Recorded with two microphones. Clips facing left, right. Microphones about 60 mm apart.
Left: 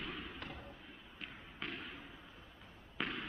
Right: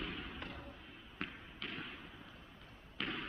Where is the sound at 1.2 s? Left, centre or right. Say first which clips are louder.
Right 6 dB; right.